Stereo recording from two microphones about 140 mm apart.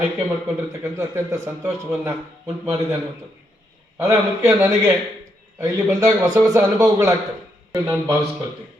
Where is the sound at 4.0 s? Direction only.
20° right (ahead or behind).